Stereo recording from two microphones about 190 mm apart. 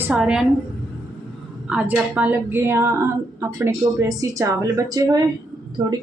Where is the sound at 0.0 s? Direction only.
5° right (ahead or behind).